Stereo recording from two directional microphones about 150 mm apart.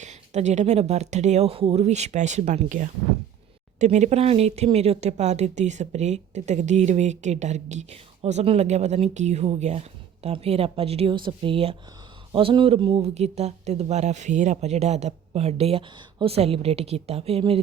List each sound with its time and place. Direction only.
0.0 s speech: 50° right (ahead or behind)